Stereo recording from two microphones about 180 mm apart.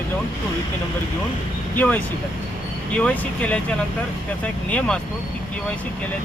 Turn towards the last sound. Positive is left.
turn(degrees=5)  # may be behind; listen again after turning